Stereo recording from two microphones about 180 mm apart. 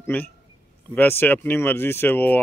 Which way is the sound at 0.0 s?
10° left (ahead or behind).